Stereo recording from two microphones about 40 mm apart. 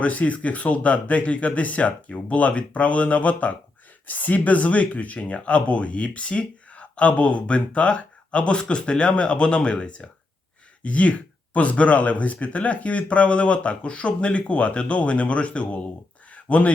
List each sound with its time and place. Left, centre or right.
0.0 s speech: left
4.0 s speech: left
10.8 s speech: left
16.3 s a sound: left